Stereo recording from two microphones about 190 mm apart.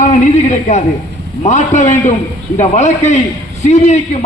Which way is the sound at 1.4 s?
40° left (ahead or behind).